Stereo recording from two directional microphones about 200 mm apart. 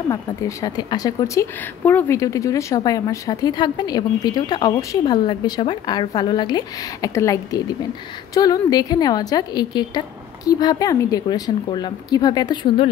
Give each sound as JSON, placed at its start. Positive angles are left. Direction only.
{"t": 0.1, "sound": "a woman's voice", "side_deg": 15}